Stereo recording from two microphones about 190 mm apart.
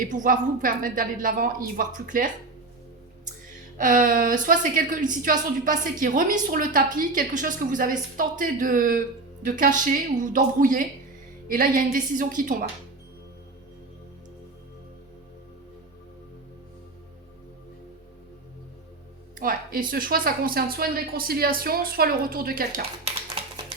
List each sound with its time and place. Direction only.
0.0 s a woman's voice: 45° right (ahead or behind)
3.8 s a woman's voice: 45° right (ahead or behind)
19.4 s a woman's voice: 45° right (ahead or behind)